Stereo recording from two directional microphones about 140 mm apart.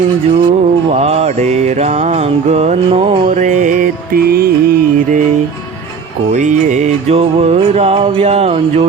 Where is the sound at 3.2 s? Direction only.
60° right (ahead or behind); by 5.2 s 90° right.